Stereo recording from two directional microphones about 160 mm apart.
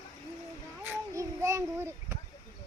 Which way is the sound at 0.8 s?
15° right (ahead or behind).